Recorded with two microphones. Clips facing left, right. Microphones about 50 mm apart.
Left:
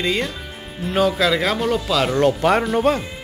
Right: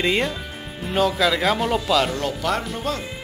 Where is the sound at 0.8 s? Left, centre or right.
Centre.